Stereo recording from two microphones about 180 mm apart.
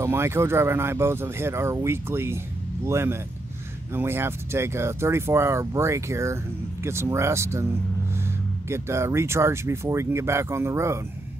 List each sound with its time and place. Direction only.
0.0 s speech: 15° right (ahead or behind)
8.6 s speech: 15° right (ahead or behind)